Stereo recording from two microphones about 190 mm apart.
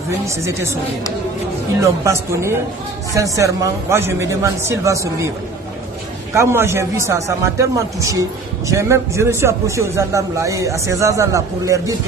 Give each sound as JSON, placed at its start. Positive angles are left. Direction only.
{"t": 1.8, "sound": "a man's voice", "side_deg": -15}
{"t": 6.3, "sound": "a man's voice", "side_deg": -15}